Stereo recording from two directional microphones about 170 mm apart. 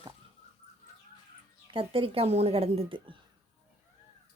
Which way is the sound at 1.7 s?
30° right (ahead or behind).